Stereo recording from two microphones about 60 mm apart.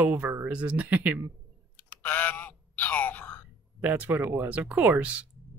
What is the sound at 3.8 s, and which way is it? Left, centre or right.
Speech, right.